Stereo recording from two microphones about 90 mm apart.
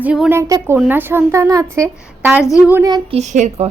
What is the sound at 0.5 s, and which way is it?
Speech, 35° right (ahead or behind).